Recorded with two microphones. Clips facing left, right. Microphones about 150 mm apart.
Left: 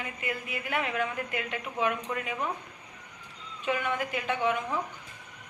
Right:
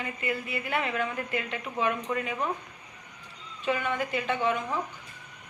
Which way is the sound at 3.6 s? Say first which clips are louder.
Right 1 dB; 10° left (ahead or behind).